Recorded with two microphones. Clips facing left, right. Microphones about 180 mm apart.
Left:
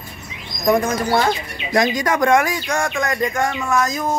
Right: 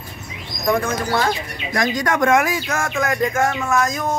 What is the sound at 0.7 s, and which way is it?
Speech, 15° left (ahead or behind).